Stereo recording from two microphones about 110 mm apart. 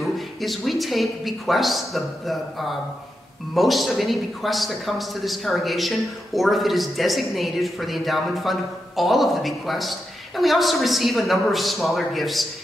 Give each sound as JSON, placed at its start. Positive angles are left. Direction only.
{"t": 0.0, "sound": "a man's voice", "side_deg": 0}